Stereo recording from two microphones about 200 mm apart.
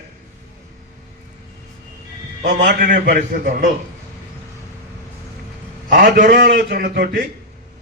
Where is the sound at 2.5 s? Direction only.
50° right (ahead or behind).